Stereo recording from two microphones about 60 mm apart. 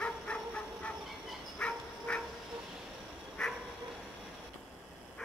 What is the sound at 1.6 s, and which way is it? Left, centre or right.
Dog, centre.